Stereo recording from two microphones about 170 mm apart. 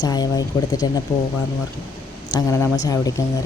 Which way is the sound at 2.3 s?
15° left (ahead or behind).